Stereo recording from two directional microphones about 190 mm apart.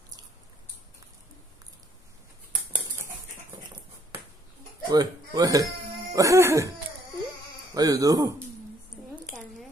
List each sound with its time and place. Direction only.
4.8 s speech: 20° right (ahead or behind)
7.7 s speech: 20° right (ahead or behind)
9.1 s a sound: centre (ahead or behind)